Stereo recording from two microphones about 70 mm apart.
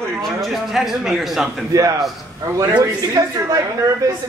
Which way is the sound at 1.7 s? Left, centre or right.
Right.